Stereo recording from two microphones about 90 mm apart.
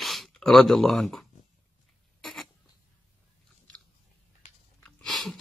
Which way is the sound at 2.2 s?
5° left (ahead or behind).